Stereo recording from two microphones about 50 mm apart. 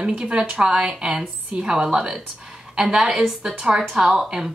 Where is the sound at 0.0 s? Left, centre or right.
Centre.